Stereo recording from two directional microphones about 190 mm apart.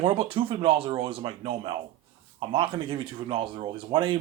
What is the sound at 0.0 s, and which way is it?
Speech, 30° right (ahead or behind).